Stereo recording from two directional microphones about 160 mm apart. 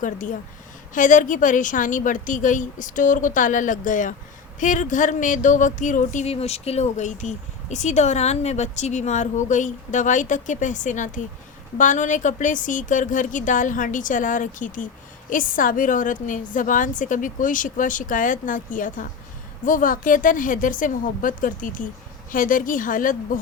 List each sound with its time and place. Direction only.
0.0 s a woman's voice: 55° left (ahead or behind)